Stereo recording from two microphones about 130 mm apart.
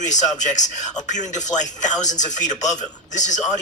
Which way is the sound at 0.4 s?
65° left (ahead or behind).